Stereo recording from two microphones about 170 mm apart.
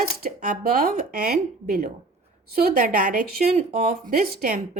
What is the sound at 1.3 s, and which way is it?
A woman's voice, 65° right (ahead or behind).